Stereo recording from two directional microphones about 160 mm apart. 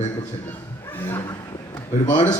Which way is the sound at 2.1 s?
45° left (ahead or behind).